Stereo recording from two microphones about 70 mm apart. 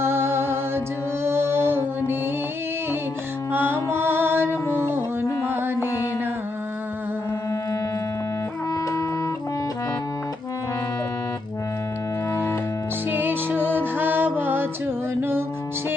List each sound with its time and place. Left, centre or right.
0.0 s music: right
1.2 s mantra: right
3.5 s music: right
5.5 s mantra: right
12.3 s music: left
13.1 s music: right